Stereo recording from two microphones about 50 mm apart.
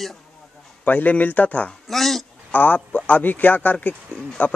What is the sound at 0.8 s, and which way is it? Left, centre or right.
Speech, left.